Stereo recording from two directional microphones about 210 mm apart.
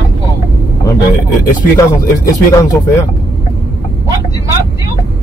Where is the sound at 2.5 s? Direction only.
15° left (ahead or behind).